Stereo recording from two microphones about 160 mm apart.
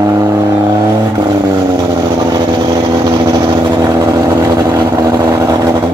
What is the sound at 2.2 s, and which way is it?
Vehicle, 25° right (ahead or behind).